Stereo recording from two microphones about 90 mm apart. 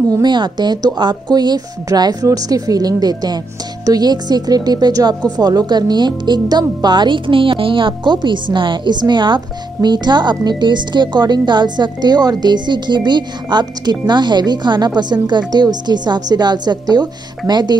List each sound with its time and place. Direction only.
0.1 s a woman's voice: 55° right (ahead or behind)